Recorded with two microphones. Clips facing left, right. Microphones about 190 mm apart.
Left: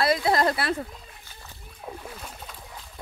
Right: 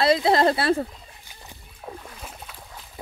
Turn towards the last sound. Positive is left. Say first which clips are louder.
# right 1 dB
turn(degrees=-5)  # may be behind; listen again after turning